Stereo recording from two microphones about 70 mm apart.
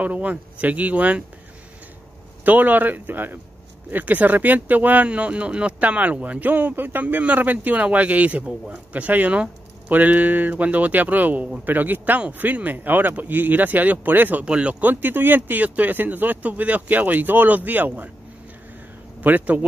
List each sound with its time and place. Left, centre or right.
0.0 s speech: right
2.4 s speech: right
14.4 s speech: centre
19.2 s speech: right